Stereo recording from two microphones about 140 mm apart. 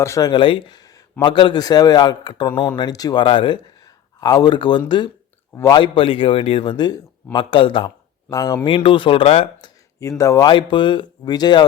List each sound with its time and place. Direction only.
0.0 s a man's voice: 25° left (ahead or behind)
8.3 s speech: 25° left (ahead or behind)
8.6 s a man's voice: 35° left (ahead or behind)
10.0 s speech: 20° left (ahead or behind)
10.4 s a man's voice: 35° left (ahead or behind)